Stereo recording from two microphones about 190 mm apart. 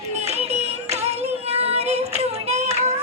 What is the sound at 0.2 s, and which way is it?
Child singing, 35° right (ahead or behind).